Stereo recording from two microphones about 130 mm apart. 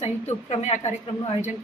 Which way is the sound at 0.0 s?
55° left (ahead or behind).